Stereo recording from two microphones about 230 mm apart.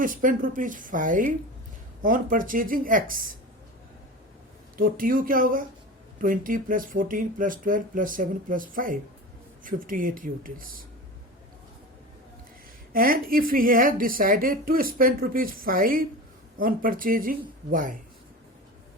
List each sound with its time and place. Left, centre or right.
0.0 s a woman's voice: right
4.8 s a woman's voice: right
12.9 s a woman's voice: right